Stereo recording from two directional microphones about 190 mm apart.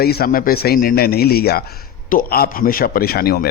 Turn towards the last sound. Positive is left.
turn(degrees=55)  # may be behind; listen again after turning